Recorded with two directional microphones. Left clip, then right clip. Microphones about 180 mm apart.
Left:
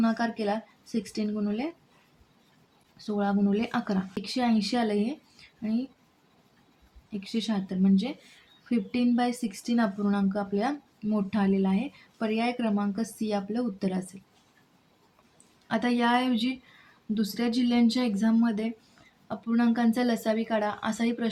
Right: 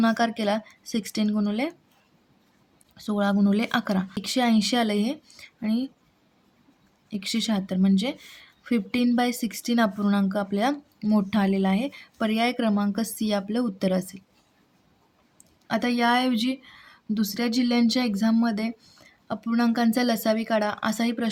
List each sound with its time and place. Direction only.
0.0 s speech: 45° right (ahead or behind)
3.0 s speech: 45° right (ahead or behind)
7.1 s speech: 45° right (ahead or behind)
15.6 s speech: 30° right (ahead or behind)